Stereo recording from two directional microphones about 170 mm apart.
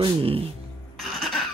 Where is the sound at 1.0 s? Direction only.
Centre (ahead or behind).